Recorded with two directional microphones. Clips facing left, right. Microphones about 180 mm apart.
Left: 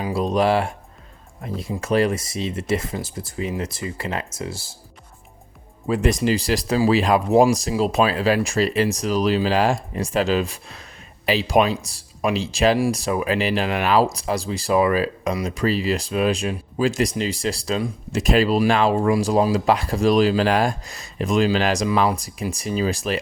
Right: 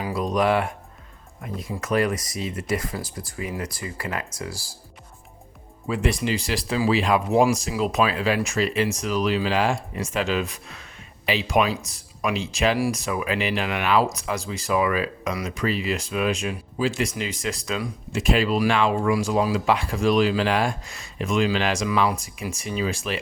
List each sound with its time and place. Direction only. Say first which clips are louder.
0.0 s music: left 3 dB; 30° left (ahead or behind)
1.4 s speech: left 3 dB; 30° left (ahead or behind)
5.9 s speech: left 5 dB; 40° left (ahead or behind)